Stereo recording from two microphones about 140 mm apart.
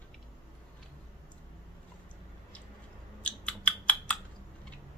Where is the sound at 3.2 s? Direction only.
10° left (ahead or behind).